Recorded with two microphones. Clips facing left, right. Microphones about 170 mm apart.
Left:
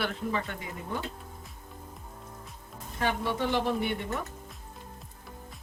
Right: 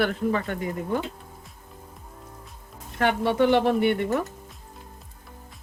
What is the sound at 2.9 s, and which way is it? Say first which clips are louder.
Speech: right 8 dB; 65° right (ahead or behind).